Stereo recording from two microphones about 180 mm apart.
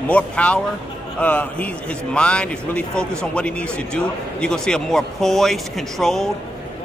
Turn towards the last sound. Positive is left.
turn(degrees=0)  # may be behind; listen again after turning